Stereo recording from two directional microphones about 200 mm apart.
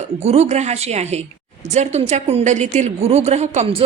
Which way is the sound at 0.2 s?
35° right (ahead or behind).